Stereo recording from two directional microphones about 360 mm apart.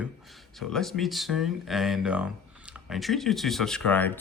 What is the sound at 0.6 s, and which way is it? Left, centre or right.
Speech, centre.